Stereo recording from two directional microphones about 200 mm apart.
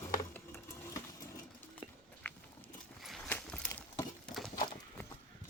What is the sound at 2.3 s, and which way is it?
Biting, 10° left (ahead or behind).